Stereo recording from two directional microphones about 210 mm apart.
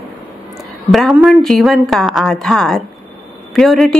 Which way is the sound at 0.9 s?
Centre (ahead or behind).